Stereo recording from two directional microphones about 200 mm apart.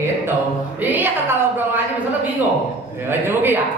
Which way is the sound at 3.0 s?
10° right (ahead or behind).